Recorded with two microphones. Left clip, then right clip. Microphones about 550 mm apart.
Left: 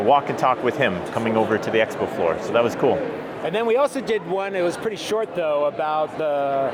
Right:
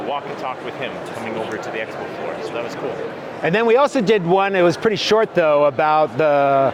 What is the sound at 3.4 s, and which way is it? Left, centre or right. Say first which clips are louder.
Speech: right 5 dB; right.